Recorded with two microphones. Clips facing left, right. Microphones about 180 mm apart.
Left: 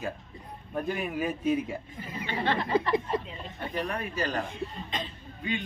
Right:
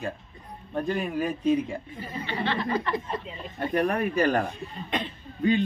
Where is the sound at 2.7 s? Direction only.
25° left (ahead or behind).